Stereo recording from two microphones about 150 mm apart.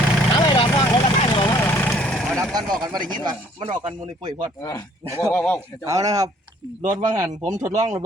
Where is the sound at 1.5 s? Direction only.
15° left (ahead or behind).